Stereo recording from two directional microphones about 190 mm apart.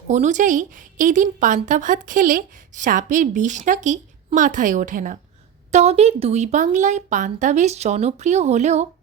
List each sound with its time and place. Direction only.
0.1 s a woman's voice: 40° right (ahead or behind)